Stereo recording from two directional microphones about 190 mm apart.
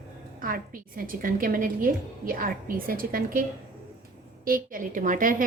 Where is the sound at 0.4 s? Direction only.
50° right (ahead or behind).